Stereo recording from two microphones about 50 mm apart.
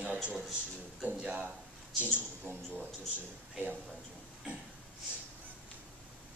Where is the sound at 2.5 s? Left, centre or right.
Right.